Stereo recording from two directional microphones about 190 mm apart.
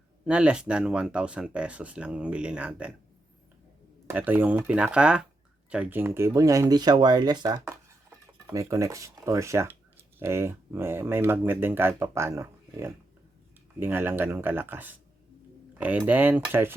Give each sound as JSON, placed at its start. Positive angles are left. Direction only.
{"t": 0.3, "sound": "speech", "side_deg": -5}
{"t": 4.0, "sound": "speech", "side_deg": -10}